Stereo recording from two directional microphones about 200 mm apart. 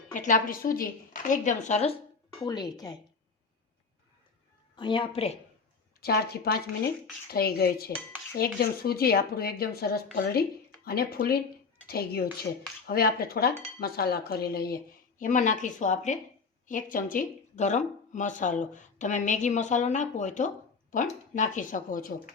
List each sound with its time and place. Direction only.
0.1 s speech: 40° left (ahead or behind)
2.4 s speech: 20° left (ahead or behind)
4.8 s speech: 25° left (ahead or behind)
6.0 s speech: 50° left (ahead or behind)